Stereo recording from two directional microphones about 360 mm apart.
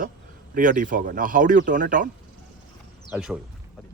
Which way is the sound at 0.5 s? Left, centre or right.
Right.